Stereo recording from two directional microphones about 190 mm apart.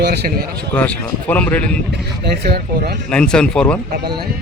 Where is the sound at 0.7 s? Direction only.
10° left (ahead or behind).